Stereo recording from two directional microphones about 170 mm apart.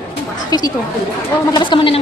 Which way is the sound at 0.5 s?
20° left (ahead or behind).